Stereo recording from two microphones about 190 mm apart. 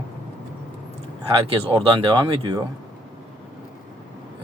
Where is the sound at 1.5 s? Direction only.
25° right (ahead or behind).